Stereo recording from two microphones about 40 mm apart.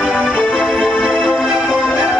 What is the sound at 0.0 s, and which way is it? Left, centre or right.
Music, right.